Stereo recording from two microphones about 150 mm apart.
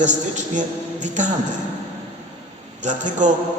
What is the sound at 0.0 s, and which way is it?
A man's voice, 55° right (ahead or behind).